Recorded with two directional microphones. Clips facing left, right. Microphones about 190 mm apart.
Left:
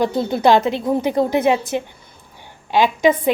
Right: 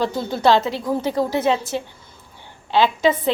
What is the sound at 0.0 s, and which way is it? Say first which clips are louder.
A woman's voice: left 3 dB; 20° left (ahead or behind).